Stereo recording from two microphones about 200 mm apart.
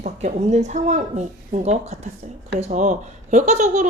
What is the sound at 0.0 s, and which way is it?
A child's voice, 35° right (ahead or behind).